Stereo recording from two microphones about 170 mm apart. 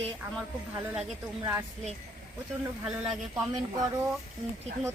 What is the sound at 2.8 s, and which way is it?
Speech, 5° right (ahead or behind).